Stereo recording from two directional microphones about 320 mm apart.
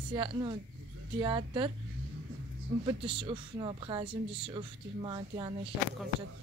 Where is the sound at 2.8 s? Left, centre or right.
Centre.